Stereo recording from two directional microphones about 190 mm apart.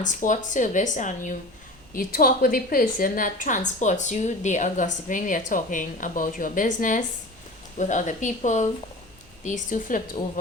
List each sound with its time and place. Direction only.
0.0 s a woman's voice: 40° left (ahead or behind)